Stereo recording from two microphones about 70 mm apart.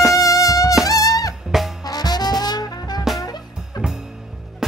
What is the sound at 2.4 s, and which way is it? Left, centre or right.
Brass instrument, left.